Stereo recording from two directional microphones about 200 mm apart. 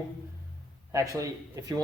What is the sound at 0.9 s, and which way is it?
Speech, 15° right (ahead or behind).